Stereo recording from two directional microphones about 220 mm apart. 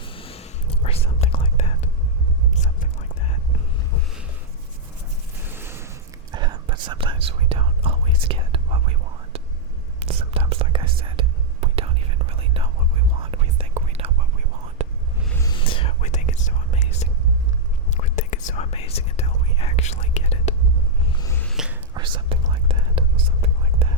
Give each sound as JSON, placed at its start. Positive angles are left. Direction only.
{"t": 0.0, "sound": "whispering", "side_deg": 25}
{"t": 5.4, "sound": "a sound", "side_deg": -10}
{"t": 6.3, "sound": "whispering", "side_deg": -20}
{"t": 15.4, "sound": "whispering", "side_deg": 20}
{"t": 21.1, "sound": "a sound", "side_deg": 15}
{"t": 21.5, "sound": "whispering", "side_deg": -5}
{"t": 21.9, "sound": "whispering", "side_deg": -20}